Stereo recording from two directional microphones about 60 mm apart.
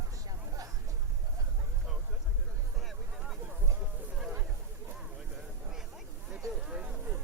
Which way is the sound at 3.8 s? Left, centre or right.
Centre.